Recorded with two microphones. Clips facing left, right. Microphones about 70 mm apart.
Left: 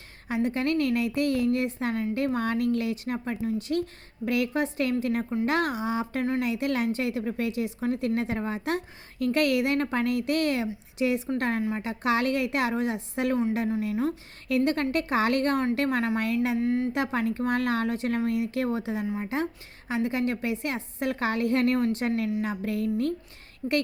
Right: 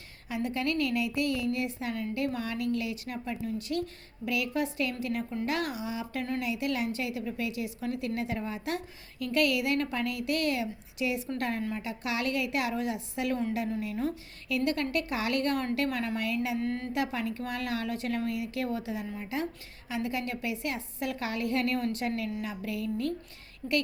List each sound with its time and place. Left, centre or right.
0.3 s a woman's voice: left
13.7 s speech: left
14.4 s a woman's voice: left
16.6 s speech: centre
16.9 s a woman's voice: left